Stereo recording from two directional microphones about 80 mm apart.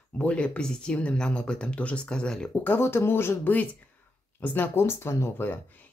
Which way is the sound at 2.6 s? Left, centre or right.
Left.